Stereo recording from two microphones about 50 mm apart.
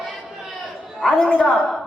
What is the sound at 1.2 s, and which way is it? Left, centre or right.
Speech, left.